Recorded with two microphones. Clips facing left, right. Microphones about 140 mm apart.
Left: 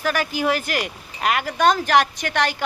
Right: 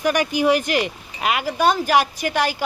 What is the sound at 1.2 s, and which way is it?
Speech, 5° right (ahead or behind).